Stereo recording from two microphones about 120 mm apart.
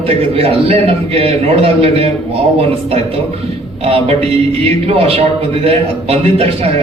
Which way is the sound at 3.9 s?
55° right (ahead or behind).